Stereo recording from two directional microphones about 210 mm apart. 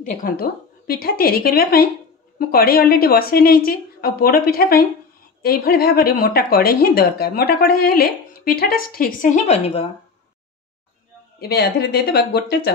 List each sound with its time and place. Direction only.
0.2 s speech: 45° left (ahead or behind)
11.3 s speech: 50° left (ahead or behind)